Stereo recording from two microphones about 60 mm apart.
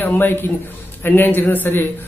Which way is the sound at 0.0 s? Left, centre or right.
Left.